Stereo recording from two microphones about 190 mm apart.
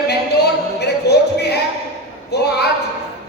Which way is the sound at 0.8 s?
60° left (ahead or behind).